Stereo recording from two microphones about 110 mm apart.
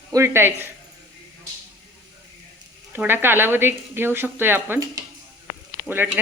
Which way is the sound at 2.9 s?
20° right (ahead or behind).